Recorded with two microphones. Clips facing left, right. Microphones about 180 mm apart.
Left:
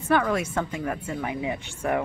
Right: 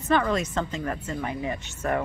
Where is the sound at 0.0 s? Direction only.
10° left (ahead or behind).